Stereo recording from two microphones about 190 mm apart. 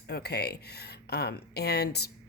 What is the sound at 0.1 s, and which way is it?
Speech, 60° left (ahead or behind).